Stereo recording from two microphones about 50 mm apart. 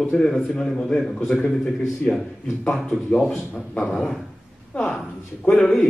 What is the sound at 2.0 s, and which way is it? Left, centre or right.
A man's voice, centre.